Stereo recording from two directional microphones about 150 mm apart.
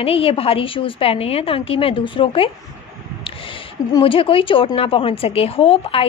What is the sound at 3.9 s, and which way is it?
A woman's voice, 35° left (ahead or behind).